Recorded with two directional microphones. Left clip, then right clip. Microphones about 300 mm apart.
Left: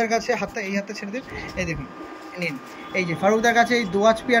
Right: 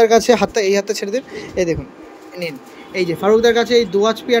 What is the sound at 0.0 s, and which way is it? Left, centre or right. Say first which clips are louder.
Speech: right 11 dB; right.